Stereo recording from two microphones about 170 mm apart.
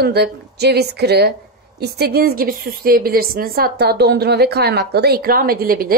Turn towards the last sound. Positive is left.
turn(degrees=-60)  # may be behind; listen again after turning